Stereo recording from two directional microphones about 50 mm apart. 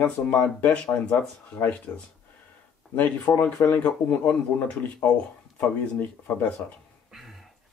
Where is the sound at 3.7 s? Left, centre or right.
Left.